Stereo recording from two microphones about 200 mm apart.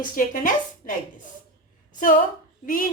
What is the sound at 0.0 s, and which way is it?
Speech, 40° left (ahead or behind).